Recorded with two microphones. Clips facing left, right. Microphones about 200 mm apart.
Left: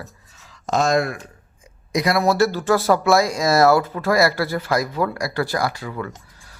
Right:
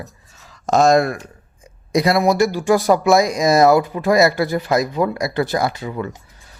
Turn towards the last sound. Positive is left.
turn(degrees=-20)  # may be behind; listen again after turning